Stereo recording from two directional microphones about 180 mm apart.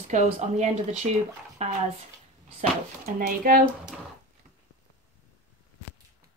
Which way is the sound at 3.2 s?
50° right (ahead or behind).